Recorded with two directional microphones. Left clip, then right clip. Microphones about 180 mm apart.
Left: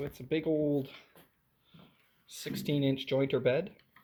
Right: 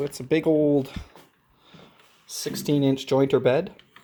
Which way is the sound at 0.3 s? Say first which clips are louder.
Right 10 dB; 25° right (ahead or behind).